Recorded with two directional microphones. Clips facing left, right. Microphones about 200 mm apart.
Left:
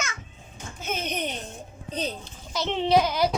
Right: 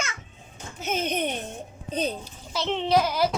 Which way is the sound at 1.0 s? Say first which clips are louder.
Right 5 dB; 50° right (ahead or behind).